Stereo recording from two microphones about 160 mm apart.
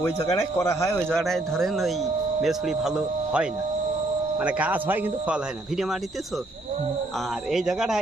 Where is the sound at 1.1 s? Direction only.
Centre (ahead or behind).